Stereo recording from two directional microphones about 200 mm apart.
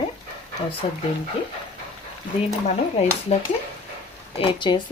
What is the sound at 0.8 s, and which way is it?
Speech, 25° left (ahead or behind).